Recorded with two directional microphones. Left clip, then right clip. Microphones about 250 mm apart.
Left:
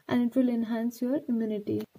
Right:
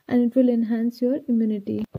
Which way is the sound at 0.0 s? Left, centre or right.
Right.